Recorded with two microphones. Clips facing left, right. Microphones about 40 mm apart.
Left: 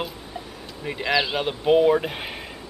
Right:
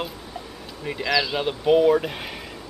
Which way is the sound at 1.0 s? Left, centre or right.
Left.